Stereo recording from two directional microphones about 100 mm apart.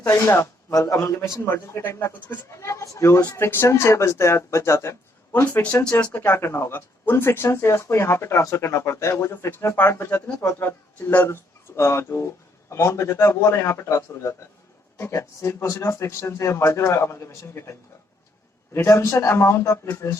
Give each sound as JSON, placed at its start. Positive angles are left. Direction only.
{"t": 0.1, "sound": "speech", "side_deg": 30}
{"t": 5.6, "sound": "speech", "side_deg": 15}
{"t": 6.2, "sound": "speech", "side_deg": 25}